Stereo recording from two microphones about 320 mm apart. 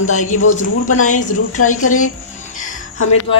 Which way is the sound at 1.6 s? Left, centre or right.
Left.